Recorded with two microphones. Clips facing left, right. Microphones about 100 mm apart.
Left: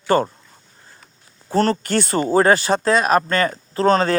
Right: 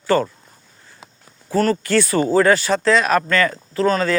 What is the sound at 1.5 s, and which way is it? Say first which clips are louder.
Speech: even; 25° left (ahead or behind).